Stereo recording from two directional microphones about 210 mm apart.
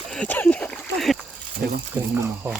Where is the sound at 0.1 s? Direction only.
5° left (ahead or behind).